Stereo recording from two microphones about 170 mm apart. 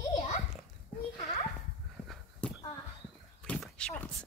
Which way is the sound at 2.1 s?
5° left (ahead or behind).